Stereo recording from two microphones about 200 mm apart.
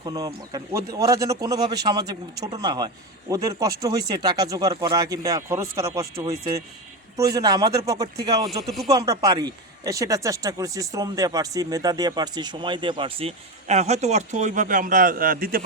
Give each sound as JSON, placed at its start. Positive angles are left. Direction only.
{"t": 0.0, "sound": "a man's voice", "side_deg": -20}